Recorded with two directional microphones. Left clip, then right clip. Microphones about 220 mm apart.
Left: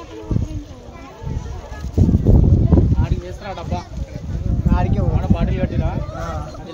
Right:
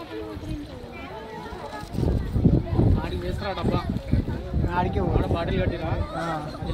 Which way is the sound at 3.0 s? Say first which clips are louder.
Left 1 dB; 45° left (ahead or behind).